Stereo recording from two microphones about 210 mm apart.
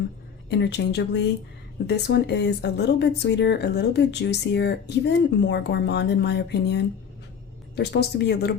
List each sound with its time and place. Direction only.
0.5 s speech: 55° left (ahead or behind)
7.8 s speech: 50° left (ahead or behind)